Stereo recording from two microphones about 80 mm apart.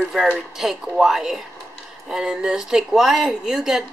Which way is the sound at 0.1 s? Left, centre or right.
Centre.